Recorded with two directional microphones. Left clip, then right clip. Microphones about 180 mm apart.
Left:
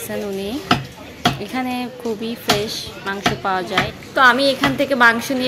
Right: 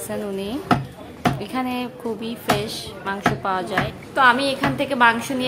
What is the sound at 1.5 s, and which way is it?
Speech, 15° left (ahead or behind).